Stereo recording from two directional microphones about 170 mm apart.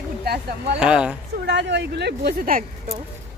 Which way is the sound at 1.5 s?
90° right.